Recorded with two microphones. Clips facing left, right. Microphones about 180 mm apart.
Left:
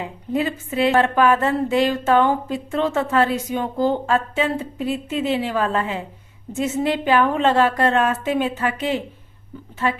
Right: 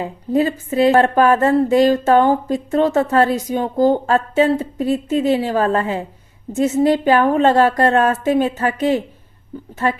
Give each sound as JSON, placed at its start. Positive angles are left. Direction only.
{"t": 0.0, "sound": "a woman's voice", "side_deg": -40}